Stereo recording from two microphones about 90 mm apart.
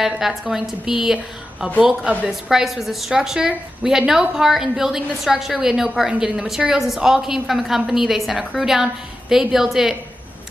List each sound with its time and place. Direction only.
0.0 s a woman's voice: 5° right (ahead or behind)